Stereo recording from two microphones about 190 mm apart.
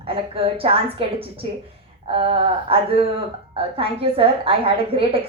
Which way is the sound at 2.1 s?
30° right (ahead or behind).